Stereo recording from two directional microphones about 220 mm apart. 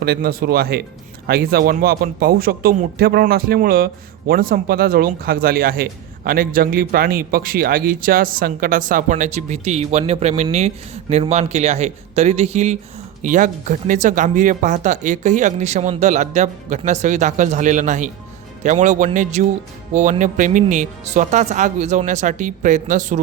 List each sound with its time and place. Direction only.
0.0 s speech: 45° right (ahead or behind)